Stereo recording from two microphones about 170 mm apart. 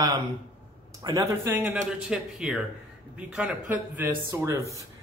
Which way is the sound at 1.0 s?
20° right (ahead or behind).